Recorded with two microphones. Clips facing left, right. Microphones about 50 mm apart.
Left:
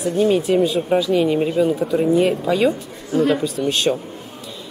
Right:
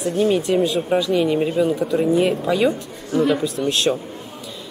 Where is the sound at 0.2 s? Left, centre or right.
Centre.